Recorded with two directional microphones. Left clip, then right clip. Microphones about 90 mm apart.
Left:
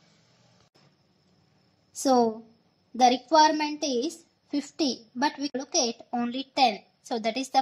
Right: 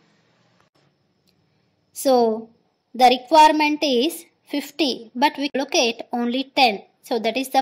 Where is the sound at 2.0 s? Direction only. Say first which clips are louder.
Right 6 dB; 50° right (ahead or behind).